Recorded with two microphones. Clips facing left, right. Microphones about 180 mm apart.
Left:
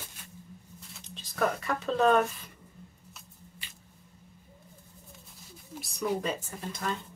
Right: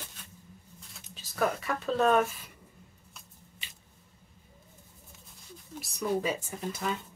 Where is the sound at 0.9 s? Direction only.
5° right (ahead or behind).